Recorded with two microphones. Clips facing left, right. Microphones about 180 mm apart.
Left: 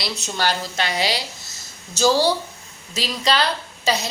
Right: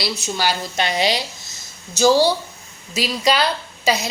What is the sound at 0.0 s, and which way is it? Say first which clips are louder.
A woman's voice: right 2 dB; 10° right (ahead or behind).